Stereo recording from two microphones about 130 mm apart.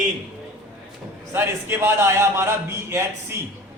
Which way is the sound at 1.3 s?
20° right (ahead or behind).